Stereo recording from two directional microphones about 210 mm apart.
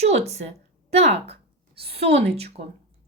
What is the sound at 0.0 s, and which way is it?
A woman's voice, 30° right (ahead or behind).